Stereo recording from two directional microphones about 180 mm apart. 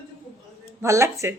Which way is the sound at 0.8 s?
15° right (ahead or behind).